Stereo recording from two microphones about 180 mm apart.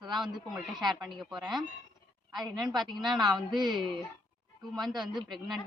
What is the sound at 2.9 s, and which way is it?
Speech, 25° right (ahead or behind).